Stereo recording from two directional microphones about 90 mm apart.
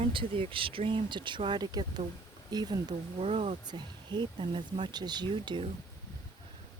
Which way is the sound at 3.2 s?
90° right.